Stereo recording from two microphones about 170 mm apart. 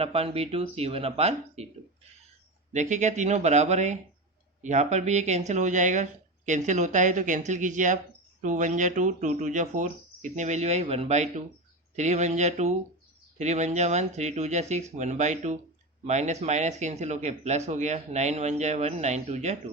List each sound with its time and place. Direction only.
0.0 s speech: 35° right (ahead or behind)
2.7 s speech: 45° right (ahead or behind)